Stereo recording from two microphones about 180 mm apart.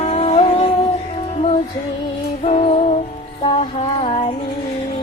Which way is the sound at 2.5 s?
35° left (ahead or behind).